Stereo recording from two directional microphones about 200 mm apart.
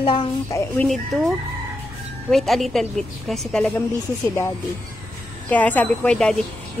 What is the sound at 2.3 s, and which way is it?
A woman's voice, centre (ahead or behind).